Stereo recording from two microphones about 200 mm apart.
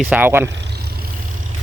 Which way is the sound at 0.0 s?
10° right (ahead or behind).